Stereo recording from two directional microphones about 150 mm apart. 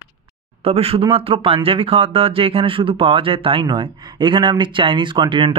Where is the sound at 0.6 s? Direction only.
40° right (ahead or behind).